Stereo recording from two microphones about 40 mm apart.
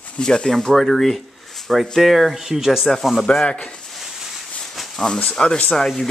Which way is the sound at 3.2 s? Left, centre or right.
Left.